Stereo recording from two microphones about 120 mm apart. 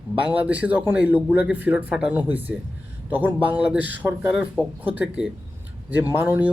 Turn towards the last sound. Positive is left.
turn(degrees=-15)  # may be behind; listen again after turning